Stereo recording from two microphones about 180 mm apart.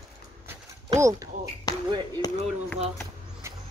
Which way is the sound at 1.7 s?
20° left (ahead or behind).